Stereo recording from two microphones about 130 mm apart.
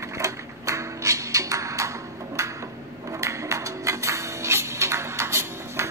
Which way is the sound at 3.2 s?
25° right (ahead or behind).